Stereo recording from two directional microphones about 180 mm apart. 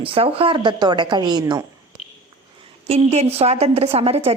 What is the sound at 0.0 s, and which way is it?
A woman's voice, 30° right (ahead or behind).